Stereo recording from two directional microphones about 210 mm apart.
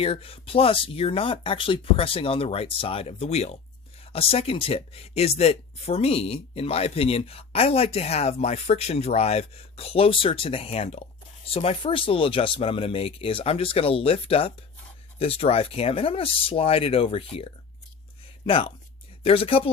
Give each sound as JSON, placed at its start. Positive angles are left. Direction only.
{"t": 0.0, "sound": "speech", "side_deg": 25}
{"t": 18.4, "sound": "speech", "side_deg": 25}